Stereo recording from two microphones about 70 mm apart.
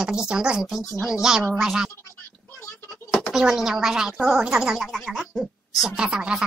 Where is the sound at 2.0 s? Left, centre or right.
Left.